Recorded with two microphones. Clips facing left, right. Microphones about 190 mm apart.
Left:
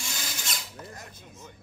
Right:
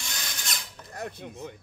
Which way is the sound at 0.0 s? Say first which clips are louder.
Left 1 dB; 5° left (ahead or behind).